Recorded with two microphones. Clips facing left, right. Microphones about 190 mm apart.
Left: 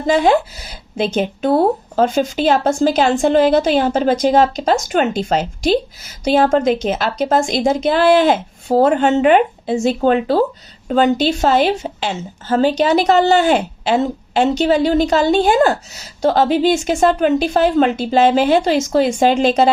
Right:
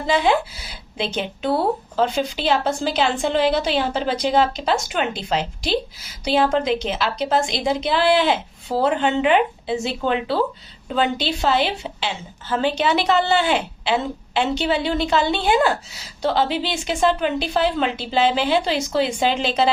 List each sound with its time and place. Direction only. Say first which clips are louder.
0.1 s speech: left 5 dB; 45° left (ahead or behind)